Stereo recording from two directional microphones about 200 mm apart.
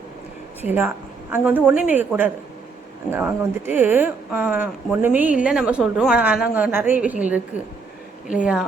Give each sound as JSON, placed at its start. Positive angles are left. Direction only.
{"t": 0.6, "sound": "a woman's voice", "side_deg": -10}